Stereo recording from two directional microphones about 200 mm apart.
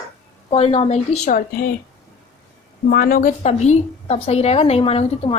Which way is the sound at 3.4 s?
35° left (ahead or behind).